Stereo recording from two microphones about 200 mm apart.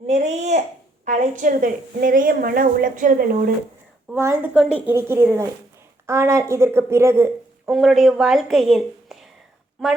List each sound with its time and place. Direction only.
0.1 s a woman's voice: 35° right (ahead or behind)
4.1 s a woman's voice: 10° right (ahead or behind)
7.7 s a woman's voice: centre (ahead or behind)